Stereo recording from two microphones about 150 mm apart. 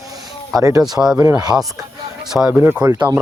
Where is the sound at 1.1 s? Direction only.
20° right (ahead or behind).